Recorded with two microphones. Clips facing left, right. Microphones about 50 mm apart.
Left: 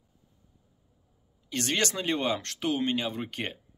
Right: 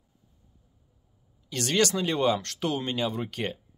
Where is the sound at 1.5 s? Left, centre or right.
Left.